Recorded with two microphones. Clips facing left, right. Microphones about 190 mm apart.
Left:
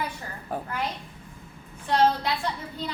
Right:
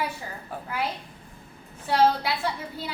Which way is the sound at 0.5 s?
45° left (ahead or behind).